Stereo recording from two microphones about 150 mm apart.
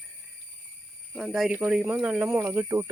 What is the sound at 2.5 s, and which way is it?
Speech, 20° right (ahead or behind).